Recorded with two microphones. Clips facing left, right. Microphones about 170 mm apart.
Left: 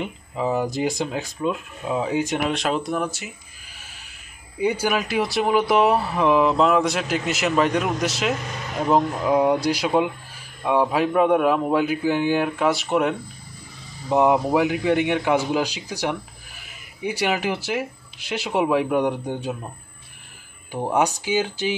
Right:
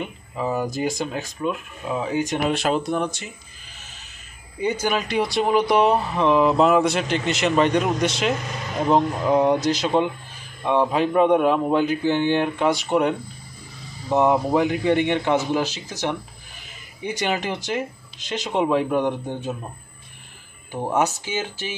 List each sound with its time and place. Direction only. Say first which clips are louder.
0.0 s a man's voice: left 2 dB; 15° left (ahead or behind)
2.2 s a man's voice: right 1 dB; 5° left (ahead or behind)
20.7 s a man's voice: left 1 dB; 10° left (ahead or behind)